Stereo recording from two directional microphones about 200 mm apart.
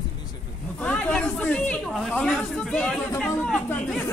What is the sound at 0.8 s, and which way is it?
Speech, 10° left (ahead or behind).